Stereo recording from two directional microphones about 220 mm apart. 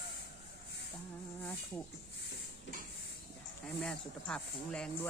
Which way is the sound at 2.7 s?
55° left (ahead or behind).